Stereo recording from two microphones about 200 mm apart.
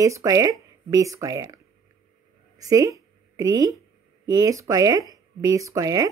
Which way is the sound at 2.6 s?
15° right (ahead or behind).